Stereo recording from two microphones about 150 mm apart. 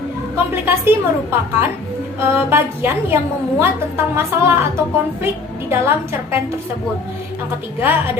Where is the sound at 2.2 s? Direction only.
15° right (ahead or behind).